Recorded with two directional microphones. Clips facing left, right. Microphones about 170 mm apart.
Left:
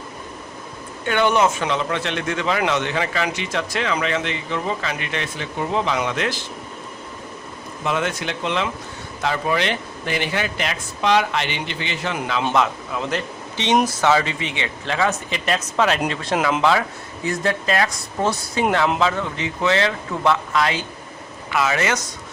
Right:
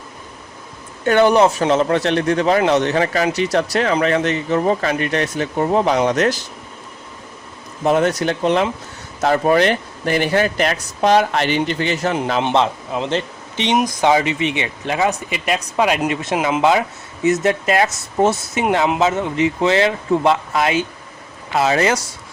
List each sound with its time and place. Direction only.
1.0 s speech: 40° right (ahead or behind)
7.9 s speech: 40° right (ahead or behind)
12.1 s a man's voice: 30° right (ahead or behind)